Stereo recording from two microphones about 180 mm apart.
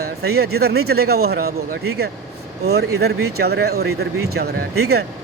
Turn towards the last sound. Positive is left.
turn(degrees=-60)  # may be behind; listen again after turning